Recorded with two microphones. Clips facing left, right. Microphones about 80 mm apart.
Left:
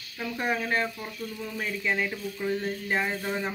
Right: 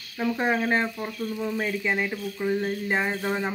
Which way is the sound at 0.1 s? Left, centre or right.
Right.